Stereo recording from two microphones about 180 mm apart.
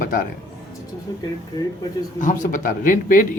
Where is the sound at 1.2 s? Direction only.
20° left (ahead or behind).